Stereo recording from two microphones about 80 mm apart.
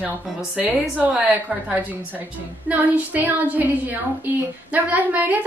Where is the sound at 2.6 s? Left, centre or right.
Centre.